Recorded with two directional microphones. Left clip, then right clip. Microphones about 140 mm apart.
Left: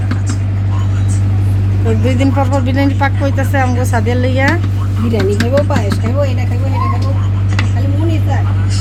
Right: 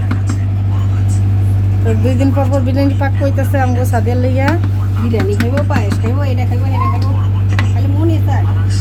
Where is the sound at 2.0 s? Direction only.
Centre (ahead or behind).